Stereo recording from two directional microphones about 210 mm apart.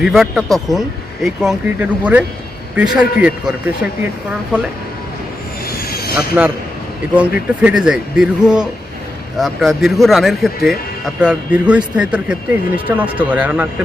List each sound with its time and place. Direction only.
0.0 s speech: centre (ahead or behind)
5.9 s vehicle: 45° left (ahead or behind)
6.1 s speech: 5° right (ahead or behind)